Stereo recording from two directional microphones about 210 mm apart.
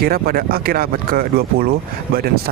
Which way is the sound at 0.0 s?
45° right (ahead or behind).